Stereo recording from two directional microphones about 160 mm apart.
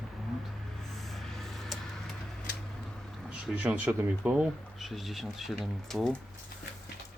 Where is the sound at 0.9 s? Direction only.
Centre (ahead or behind).